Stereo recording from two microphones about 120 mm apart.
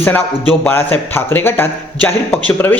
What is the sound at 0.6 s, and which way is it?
A man's voice, 20° left (ahead or behind).